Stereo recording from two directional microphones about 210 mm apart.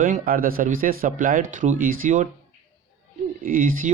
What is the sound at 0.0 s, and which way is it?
Speech, 40° right (ahead or behind).